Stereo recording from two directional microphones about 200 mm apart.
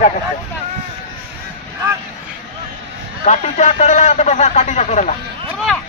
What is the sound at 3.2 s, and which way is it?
A man's voice, 35° left (ahead or behind).